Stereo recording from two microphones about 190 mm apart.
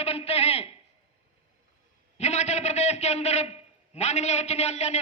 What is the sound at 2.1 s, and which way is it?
A man's voice, 35° left (ahead or behind).